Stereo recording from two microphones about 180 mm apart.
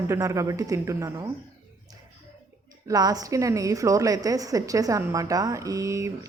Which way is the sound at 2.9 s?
20° right (ahead or behind).